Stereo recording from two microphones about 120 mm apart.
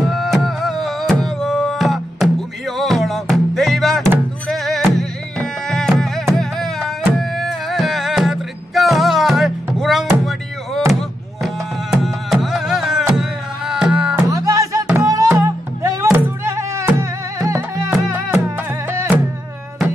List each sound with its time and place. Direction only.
0.0 s music: centre (ahead or behind)
14.3 s music: 25° right (ahead or behind)